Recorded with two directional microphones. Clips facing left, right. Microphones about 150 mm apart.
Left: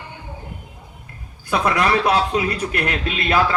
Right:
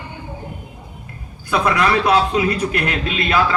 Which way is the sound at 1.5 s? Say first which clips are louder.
Right 1 dB; 45° left (ahead or behind).